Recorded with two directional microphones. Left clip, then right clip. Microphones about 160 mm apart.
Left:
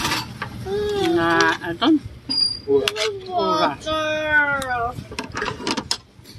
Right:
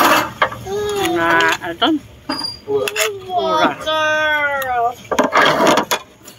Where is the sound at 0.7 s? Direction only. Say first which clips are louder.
Right 2 dB; 10° left (ahead or behind).